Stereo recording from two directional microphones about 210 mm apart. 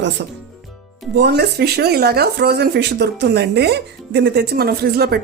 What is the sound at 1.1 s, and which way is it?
Speech, 50° right (ahead or behind).